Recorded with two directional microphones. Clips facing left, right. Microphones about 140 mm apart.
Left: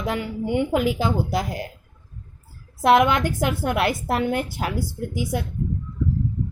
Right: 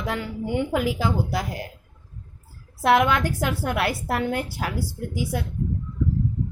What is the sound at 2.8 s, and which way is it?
A woman's voice, 20° left (ahead or behind).